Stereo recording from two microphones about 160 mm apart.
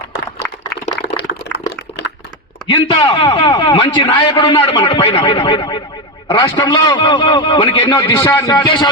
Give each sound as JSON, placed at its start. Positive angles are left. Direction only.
{"t": 0.1, "sound": "a sound", "side_deg": 90}
{"t": 2.6, "sound": "a man's voice", "side_deg": 35}
{"t": 7.9, "sound": "a man's voice", "side_deg": 20}
{"t": 8.5, "sound": "a man's voice", "side_deg": 30}